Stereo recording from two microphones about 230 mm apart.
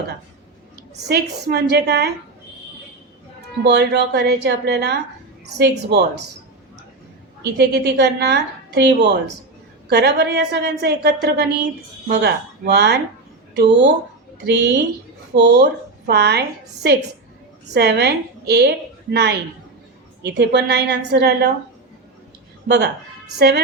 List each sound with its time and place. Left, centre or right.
1.0 s a woman's voice: right
3.6 s a woman's voice: right
7.5 s a woman's voice: right
17.7 s a woman's voice: right